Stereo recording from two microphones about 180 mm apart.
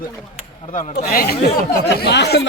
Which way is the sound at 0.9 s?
60° left (ahead or behind).